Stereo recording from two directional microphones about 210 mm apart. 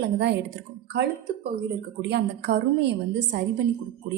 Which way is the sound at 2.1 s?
55° right (ahead or behind).